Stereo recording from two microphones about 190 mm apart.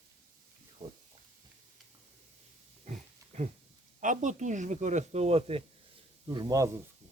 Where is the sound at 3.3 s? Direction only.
35° right (ahead or behind).